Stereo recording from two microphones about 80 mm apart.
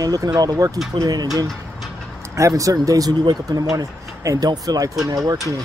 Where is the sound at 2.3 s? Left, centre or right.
Right.